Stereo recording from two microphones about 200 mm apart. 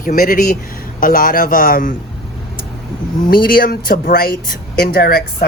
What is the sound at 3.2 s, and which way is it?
Speech, 45° left (ahead or behind).